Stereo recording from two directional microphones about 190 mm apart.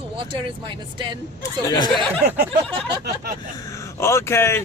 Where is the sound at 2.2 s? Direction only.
55° right (ahead or behind).